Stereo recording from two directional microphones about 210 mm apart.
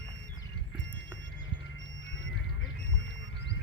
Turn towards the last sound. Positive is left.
turn(degrees=65)  # may be behind; listen again after turning